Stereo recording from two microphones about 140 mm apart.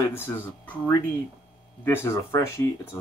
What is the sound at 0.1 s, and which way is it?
Speech, 15° left (ahead or behind).